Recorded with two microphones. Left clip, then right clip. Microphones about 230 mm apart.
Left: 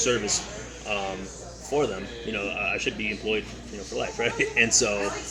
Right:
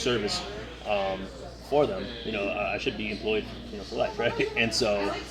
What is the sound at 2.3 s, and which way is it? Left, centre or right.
A man's voice, centre.